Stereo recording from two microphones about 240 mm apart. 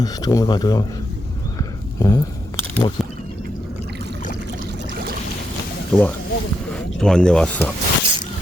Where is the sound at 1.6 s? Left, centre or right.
Centre.